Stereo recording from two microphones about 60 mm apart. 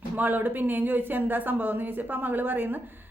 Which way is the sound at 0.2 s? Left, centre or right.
Right.